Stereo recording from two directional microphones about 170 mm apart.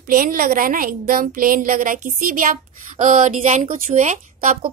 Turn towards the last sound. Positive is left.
turn(degrees=-45)  # may be behind; listen again after turning